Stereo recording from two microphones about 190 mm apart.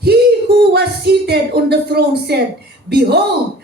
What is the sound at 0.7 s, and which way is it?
Speech, 60° right (ahead or behind).